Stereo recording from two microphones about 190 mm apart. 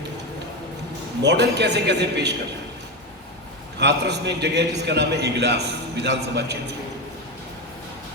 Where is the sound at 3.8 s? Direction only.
60° right (ahead or behind).